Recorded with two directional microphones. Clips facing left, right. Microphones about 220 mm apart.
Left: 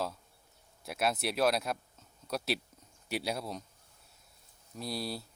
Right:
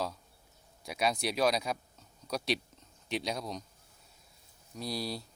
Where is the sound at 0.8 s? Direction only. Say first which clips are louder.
Right 1 dB; 5° left (ahead or behind).